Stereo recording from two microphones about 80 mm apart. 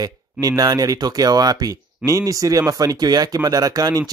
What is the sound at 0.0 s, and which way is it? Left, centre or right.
Speech, right.